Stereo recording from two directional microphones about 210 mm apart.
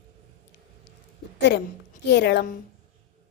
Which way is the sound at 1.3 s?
55° left (ahead or behind).